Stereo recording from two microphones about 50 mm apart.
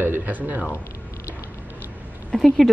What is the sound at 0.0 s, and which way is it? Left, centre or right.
Speech, right.